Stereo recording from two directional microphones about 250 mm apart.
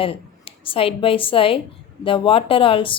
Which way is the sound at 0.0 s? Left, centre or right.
Left.